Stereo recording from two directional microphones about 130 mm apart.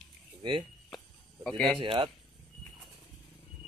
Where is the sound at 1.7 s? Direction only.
45° right (ahead or behind).